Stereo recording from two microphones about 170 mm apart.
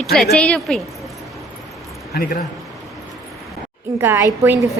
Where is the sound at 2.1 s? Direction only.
60° left (ahead or behind).